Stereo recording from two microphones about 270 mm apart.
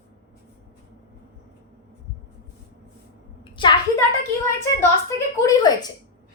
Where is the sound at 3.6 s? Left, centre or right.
Centre.